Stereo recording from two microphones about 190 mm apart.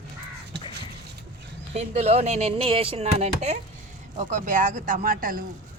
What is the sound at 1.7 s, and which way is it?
Speech, 35° right (ahead or behind).